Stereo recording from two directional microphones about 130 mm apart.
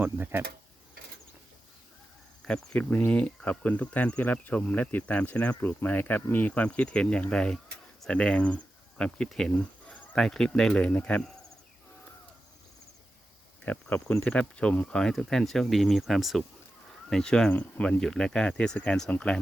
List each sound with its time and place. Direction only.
0.0 s speech: 15° right (ahead or behind)
2.5 s speech: 10° left (ahead or behind)
13.7 s speech: 10° left (ahead or behind)